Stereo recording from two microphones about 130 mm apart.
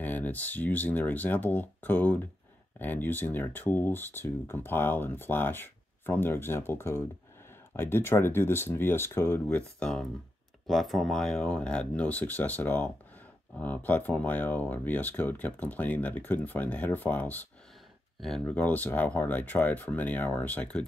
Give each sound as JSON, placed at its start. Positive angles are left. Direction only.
{"t": 0.0, "sound": "speech", "side_deg": 15}
{"t": 9.6, "sound": "speech", "side_deg": 5}